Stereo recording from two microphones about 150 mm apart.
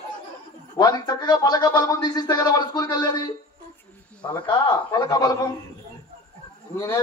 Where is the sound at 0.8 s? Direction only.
30° left (ahead or behind).